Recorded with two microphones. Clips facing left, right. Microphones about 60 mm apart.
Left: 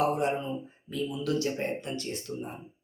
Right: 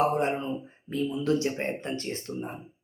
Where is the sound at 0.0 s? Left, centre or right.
Right.